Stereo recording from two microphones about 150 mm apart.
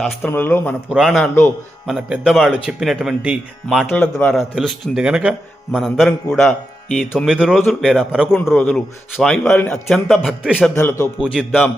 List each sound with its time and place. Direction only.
0.0 s speech: 10° left (ahead or behind)
0.9 s speech: centre (ahead or behind)
3.9 s speech: 10° left (ahead or behind)
4.5 s speech: 5° right (ahead or behind); by 9.8 s 10° left (ahead or behind)
9.8 s speech: centre (ahead or behind)
10.8 s speech: 15° left (ahead or behind)
11.2 s speech: 5° right (ahead or behind)